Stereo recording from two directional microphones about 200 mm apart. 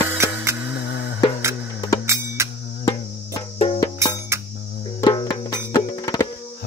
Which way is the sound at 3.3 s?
25° left (ahead or behind).